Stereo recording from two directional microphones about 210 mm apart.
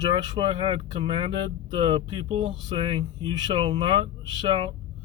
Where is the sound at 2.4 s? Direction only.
25° right (ahead or behind).